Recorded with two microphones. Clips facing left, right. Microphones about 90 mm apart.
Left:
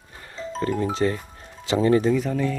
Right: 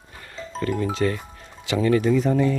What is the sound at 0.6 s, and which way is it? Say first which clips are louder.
Speech: even; 25° left (ahead or behind).